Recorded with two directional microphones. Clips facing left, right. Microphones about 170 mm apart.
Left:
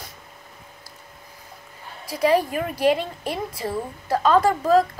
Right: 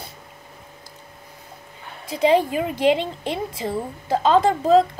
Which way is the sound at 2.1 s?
25° right (ahead or behind).